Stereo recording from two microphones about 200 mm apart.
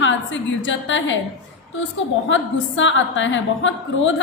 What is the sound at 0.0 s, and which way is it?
A woman's voice, 70° left (ahead or behind).